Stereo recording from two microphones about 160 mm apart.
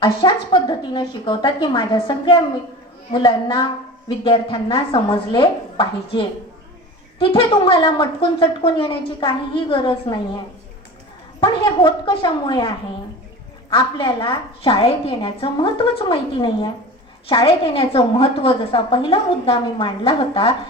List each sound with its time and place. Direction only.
0.0 s a woman's voice: 30° left (ahead or behind)
7.2 s a woman's voice: 30° left (ahead or behind)
11.3 s a woman's voice: 30° left (ahead or behind)